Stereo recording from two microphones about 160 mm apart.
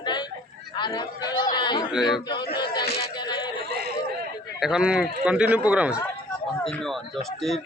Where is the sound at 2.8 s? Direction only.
85° left.